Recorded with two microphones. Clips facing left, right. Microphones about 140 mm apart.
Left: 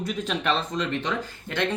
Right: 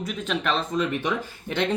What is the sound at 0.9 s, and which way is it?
Speech, 10° right (ahead or behind).